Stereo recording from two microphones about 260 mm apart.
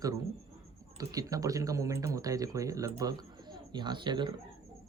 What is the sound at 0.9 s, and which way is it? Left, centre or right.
A man's voice, centre.